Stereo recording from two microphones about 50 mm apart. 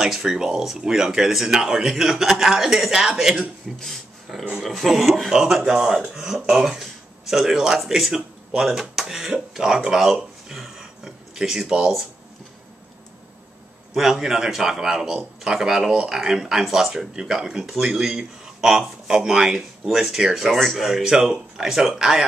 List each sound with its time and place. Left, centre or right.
0.0 s speech: centre
3.8 s speech: centre
13.9 s speech: centre
15.9 s speech: centre
16.2 s speech: centre
20.5 s speech: centre
20.9 s speech: centre